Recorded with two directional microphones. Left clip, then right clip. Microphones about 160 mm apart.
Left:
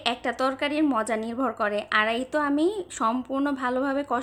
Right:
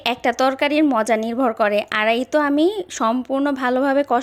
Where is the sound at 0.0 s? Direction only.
40° right (ahead or behind).